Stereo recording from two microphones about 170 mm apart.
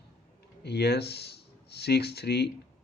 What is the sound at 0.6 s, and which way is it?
Speech, 75° left (ahead or behind).